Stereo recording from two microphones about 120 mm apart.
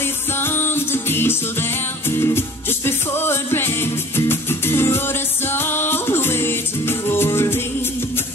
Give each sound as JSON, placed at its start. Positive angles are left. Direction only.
{"t": 0.4, "sound": "music", "side_deg": 20}